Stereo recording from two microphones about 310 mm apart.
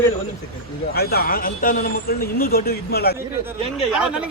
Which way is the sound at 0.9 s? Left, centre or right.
Left.